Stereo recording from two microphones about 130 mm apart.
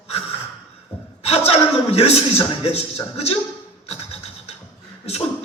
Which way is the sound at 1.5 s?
50° left (ahead or behind).